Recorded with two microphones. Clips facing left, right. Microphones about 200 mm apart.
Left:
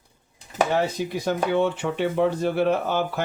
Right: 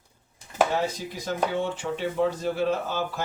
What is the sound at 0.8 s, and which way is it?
Speech, 65° left (ahead or behind).